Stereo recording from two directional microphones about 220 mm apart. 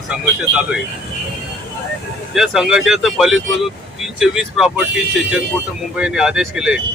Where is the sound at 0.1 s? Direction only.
5° right (ahead or behind).